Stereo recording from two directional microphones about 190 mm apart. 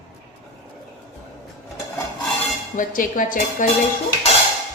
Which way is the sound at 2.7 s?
45° left (ahead or behind).